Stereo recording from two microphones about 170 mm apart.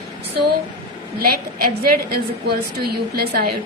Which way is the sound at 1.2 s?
60° right (ahead or behind).